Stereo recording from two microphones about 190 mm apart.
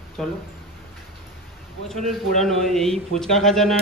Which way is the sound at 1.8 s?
Centre (ahead or behind).